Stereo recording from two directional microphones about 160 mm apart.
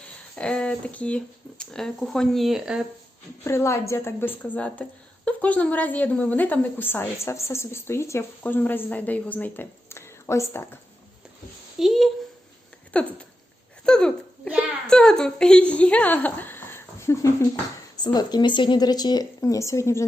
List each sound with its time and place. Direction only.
0.3 s speech: 5° left (ahead or behind)
3.4 s a woman's voice: 15° left (ahead or behind)
11.8 s a woman's voice: centre (ahead or behind); by 20.1 s 15° left (ahead or behind)